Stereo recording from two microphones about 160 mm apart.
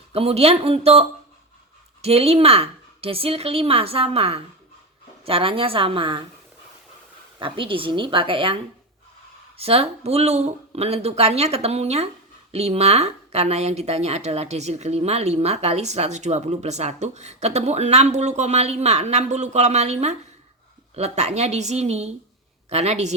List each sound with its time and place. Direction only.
0.1 s speech: 40° right (ahead or behind)
7.3 s speech: 30° right (ahead or behind)
9.6 s speech: 40° right (ahead or behind)